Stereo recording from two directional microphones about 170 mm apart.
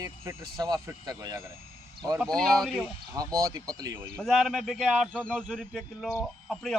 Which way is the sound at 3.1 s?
20° right (ahead or behind).